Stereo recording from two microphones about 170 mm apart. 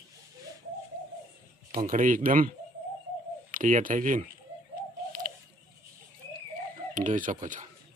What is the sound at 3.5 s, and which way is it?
Speech, 50° right (ahead or behind).